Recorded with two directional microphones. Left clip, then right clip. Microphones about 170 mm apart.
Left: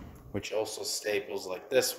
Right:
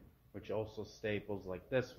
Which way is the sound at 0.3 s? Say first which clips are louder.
Left 9 dB; 5° left (ahead or behind).